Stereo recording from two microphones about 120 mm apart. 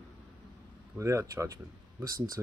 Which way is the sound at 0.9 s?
25° right (ahead or behind).